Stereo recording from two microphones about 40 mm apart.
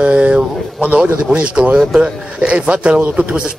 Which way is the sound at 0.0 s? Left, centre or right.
Right.